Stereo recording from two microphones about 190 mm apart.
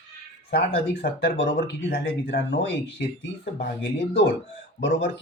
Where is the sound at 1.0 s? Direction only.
65° left (ahead or behind).